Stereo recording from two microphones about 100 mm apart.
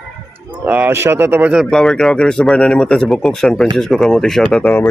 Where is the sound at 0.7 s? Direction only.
20° right (ahead or behind).